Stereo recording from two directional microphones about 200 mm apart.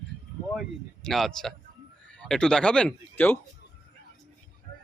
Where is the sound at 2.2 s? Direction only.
5° left (ahead or behind).